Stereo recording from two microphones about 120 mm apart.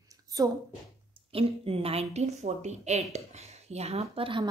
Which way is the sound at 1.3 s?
50° right (ahead or behind).